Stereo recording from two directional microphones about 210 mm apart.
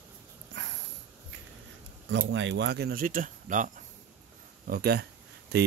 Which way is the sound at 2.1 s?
60° right (ahead or behind).